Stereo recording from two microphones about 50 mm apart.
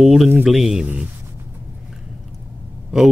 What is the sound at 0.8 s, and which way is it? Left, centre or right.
Speech, right.